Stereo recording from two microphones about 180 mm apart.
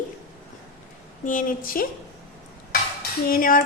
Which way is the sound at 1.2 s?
50° left (ahead or behind).